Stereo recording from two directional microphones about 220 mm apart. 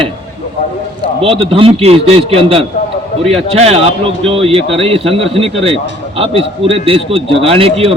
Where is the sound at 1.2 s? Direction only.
25° right (ahead or behind).